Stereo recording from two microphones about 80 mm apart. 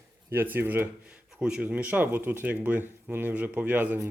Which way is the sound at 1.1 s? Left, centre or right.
Centre.